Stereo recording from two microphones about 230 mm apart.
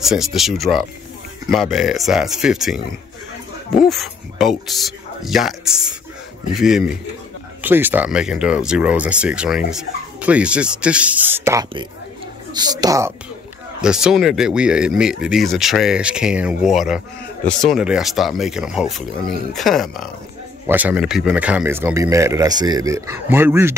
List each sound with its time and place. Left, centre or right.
0.0 s speech: centre
3.8 s speech: centre
13.7 s speech: centre